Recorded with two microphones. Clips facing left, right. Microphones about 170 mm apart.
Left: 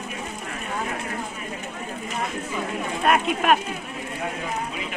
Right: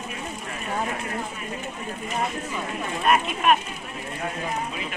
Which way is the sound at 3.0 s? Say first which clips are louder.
Left 1 dB; 75° left (ahead or behind).